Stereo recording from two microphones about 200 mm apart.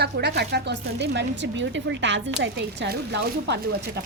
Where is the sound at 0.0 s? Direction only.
55° right (ahead or behind).